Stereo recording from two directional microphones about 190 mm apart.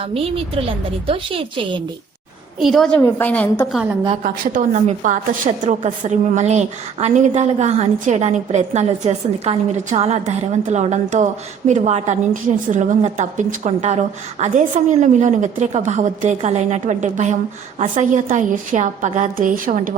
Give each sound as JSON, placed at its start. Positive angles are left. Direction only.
{"t": 0.1, "sound": "a woman's voice", "side_deg": -30}
{"t": 2.6, "sound": "a woman's voice", "side_deg": 0}
{"t": 4.2, "sound": "a woman's voice", "side_deg": -40}